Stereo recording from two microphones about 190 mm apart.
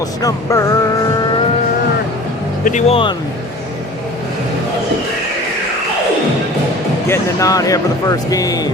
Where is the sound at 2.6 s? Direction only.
40° left (ahead or behind).